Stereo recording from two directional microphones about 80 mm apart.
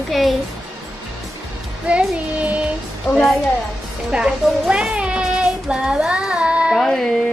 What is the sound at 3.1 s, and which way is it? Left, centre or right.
Speech, centre.